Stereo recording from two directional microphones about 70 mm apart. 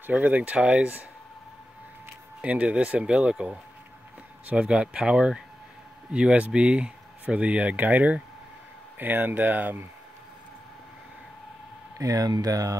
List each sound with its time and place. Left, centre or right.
0.1 s speech: centre
2.4 s speech: centre
12.0 s speech: right